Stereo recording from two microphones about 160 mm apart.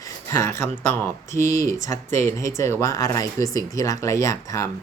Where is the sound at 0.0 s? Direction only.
15° left (ahead or behind).